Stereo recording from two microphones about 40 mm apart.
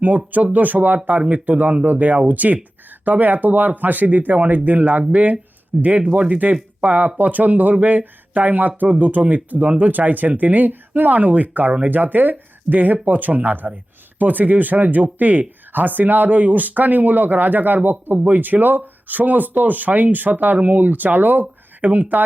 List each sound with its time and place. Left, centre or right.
0.5 s speech: right